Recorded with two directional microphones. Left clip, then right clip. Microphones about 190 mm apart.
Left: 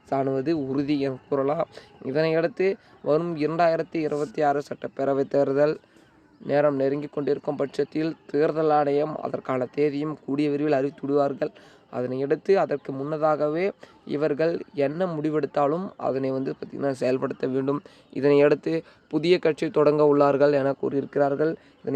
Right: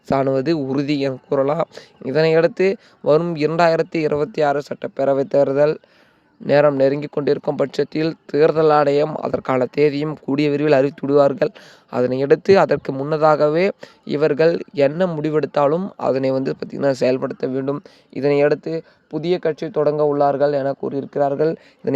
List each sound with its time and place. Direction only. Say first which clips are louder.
0.1 s speech: right 7 dB; 60° right (ahead or behind); by 5.8 s 35° right (ahead or behind)
6.5 s speech: right 8 dB; 50° right (ahead or behind)
17.2 s speech: right 4 dB; 25° right (ahead or behind)
18.4 s speech: right 3 dB; 10° right (ahead or behind)
21.3 s speech: right 6 dB; 35° right (ahead or behind)
21.8 s speech: right 8 dB; 55° right (ahead or behind)